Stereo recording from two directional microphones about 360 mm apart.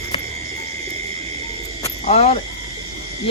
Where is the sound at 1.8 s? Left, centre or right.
Centre.